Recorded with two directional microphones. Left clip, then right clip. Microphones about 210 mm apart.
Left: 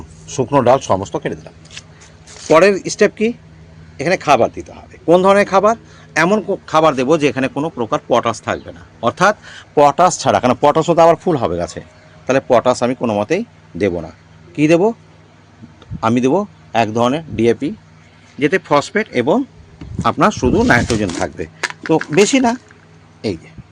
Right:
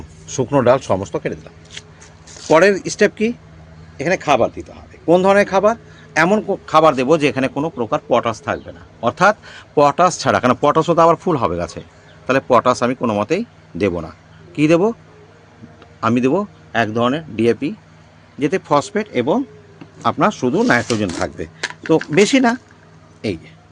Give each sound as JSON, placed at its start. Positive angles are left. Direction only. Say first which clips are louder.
{"t": 0.3, "sound": "speech", "louder": "left 2 dB", "side_deg": -5}
{"t": 16.0, "sound": "speech", "louder": "left 2 dB", "side_deg": 5}
{"t": 21.6, "sound": "a sound", "louder": "even", "side_deg": 30}
{"t": 22.1, "sound": "speech", "louder": "left 2 dB", "side_deg": -5}